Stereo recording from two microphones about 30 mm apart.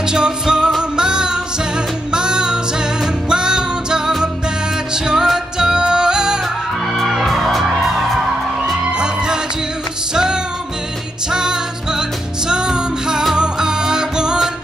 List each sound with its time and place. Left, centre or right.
0.1 s music: right
7.1 s music: centre
8.9 s music: right